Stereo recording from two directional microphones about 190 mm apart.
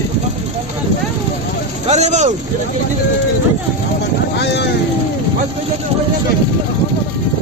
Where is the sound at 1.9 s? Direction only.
35° right (ahead or behind).